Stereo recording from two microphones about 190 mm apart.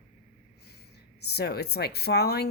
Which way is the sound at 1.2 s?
55° left (ahead or behind).